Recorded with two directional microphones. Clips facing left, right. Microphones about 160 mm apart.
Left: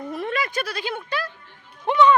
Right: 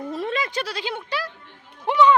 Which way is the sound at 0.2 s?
15° right (ahead or behind).